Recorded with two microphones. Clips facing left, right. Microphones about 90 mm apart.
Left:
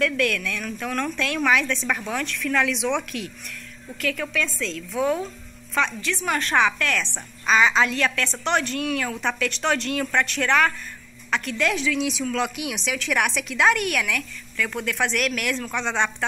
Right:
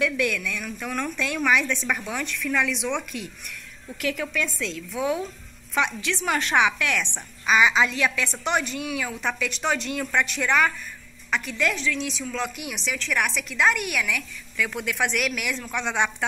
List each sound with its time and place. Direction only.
0.0 s a woman's voice: 5° right (ahead or behind)
4.0 s a woman's voice: 20° right (ahead or behind)
5.8 s a woman's voice: 15° right (ahead or behind)
11.8 s a woman's voice: 10° left (ahead or behind); by 16.3 s 10° right (ahead or behind)